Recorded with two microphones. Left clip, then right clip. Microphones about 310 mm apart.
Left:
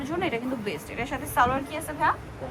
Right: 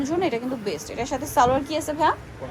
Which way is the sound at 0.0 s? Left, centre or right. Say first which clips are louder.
Right 4 dB; centre.